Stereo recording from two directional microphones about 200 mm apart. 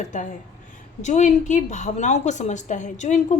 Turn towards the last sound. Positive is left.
turn(degrees=35)  # may be behind; listen again after turning